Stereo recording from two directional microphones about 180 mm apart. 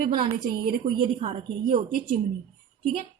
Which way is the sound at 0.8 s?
35° right (ahead or behind).